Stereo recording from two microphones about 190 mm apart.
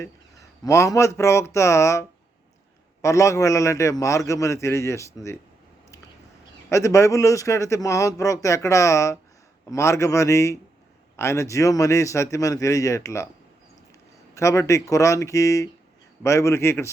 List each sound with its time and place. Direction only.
0.0 s speech: 15° left (ahead or behind)
6.7 s speech: 15° left (ahead or behind)
14.3 s speech: 15° left (ahead or behind)